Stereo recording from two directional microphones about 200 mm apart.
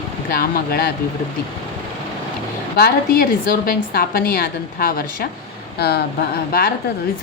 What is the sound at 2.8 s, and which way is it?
A woman's voice, 50° left (ahead or behind).